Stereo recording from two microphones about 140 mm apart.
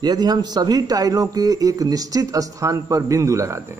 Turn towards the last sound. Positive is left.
turn(degrees=-20)  # may be behind; listen again after turning